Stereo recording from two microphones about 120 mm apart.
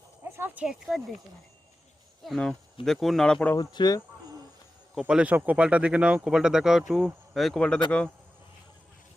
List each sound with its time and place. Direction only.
0.3 s speech: 20° right (ahead or behind); by 1.0 s centre (ahead or behind)
2.2 s speech: 5° left (ahead or behind)
3.5 s speech: 35° left (ahead or behind)
4.9 s speech: 10° right (ahead or behind); by 8.1 s 10° left (ahead or behind)